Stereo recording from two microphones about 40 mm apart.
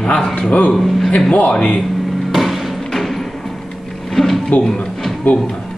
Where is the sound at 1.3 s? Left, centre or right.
Left.